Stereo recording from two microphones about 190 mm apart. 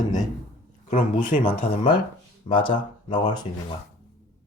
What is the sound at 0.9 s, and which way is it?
Speech, 40° left (ahead or behind).